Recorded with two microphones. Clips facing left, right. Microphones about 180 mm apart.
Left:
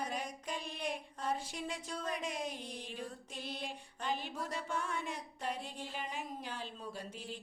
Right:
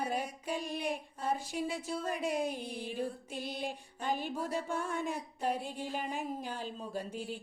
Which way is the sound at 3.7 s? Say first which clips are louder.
Right 3 dB; 45° right (ahead or behind).